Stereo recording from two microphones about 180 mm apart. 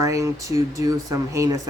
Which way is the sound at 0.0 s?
20° right (ahead or behind).